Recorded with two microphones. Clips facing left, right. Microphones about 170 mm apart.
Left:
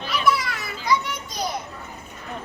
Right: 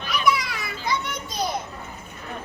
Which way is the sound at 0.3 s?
20° right (ahead or behind).